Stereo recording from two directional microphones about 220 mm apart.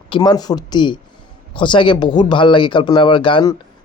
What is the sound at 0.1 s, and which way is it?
Speech, 20° left (ahead or behind).